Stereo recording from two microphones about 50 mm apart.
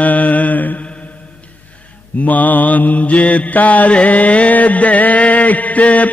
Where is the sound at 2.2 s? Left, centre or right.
Left.